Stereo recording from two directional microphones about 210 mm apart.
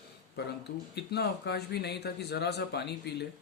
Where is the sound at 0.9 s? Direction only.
50° left (ahead or behind).